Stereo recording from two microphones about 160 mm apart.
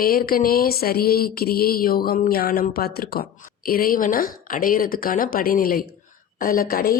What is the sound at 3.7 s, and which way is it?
A woman's voice, 65° left (ahead or behind).